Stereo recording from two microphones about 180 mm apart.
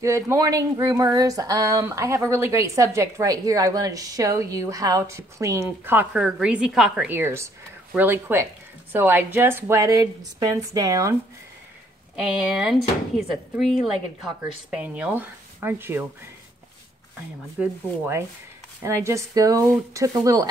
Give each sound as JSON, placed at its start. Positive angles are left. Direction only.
{"t": 0.0, "sound": "speech", "side_deg": -15}
{"t": 12.2, "sound": "speech", "side_deg": -5}
{"t": 17.6, "sound": "speech", "side_deg": -10}